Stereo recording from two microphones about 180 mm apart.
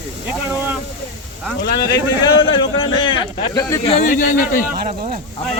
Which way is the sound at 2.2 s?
30° left (ahead or behind).